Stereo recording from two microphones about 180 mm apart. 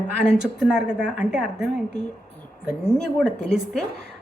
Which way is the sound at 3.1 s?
Centre (ahead or behind).